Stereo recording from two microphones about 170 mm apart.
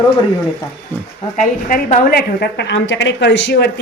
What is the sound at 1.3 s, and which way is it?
A woman's voice, 50° left (ahead or behind).